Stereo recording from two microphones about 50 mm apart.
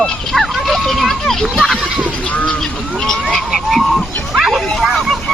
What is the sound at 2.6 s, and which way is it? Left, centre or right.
A child's voice, centre.